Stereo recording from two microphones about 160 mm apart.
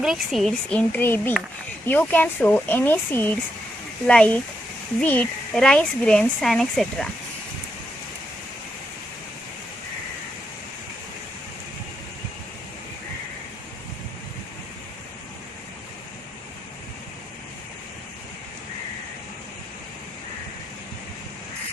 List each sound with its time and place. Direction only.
0.0 s speech: 5° right (ahead or behind)